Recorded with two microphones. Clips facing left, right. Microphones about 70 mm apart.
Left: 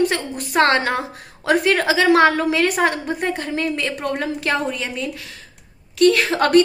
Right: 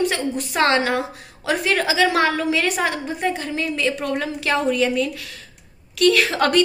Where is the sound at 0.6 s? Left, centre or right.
Left.